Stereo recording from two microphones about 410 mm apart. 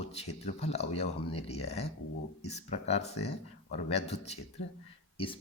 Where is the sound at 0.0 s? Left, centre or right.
Centre.